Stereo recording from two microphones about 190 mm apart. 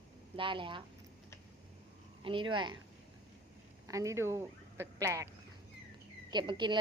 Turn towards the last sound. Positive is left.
turn(degrees=-25)  # may be behind; listen again after turning